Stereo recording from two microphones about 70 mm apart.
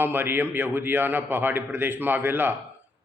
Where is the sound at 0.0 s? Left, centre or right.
Right.